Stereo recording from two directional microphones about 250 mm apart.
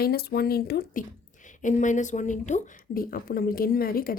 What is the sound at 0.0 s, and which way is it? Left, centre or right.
Speech, left.